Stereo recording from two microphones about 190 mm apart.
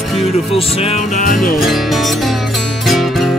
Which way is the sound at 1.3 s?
Centre (ahead or behind).